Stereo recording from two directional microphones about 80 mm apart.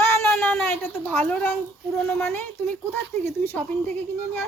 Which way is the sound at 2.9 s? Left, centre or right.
Left.